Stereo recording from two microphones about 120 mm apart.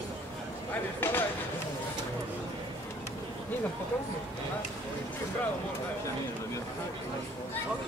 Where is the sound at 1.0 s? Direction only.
20° left (ahead or behind).